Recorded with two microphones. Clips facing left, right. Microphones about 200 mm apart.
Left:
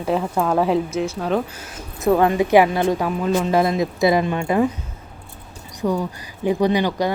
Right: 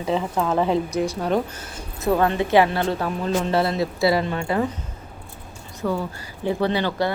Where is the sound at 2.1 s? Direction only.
15° left (ahead or behind).